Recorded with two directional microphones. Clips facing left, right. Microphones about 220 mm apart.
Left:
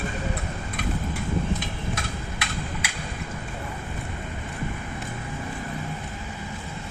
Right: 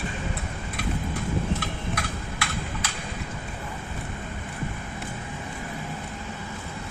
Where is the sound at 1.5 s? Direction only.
20° left (ahead or behind).